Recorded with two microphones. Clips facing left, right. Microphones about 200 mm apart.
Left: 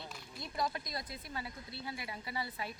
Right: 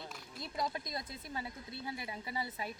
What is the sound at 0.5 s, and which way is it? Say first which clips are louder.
Speech: left 1 dB; 20° right (ahead or behind).